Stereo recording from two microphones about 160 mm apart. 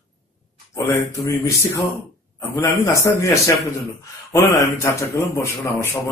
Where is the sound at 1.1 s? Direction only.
20° left (ahead or behind).